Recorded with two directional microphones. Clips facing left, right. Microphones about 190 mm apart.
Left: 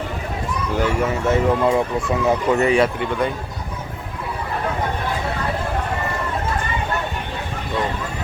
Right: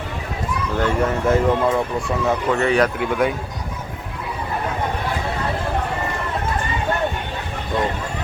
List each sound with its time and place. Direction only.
0.8 s speech: 10° left (ahead or behind)
2.0 s speech: 20° left (ahead or behind)
2.7 s speech: centre (ahead or behind)